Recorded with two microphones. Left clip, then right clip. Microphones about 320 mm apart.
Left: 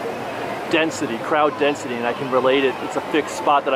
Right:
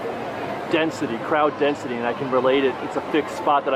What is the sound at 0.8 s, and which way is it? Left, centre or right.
Speech, centre.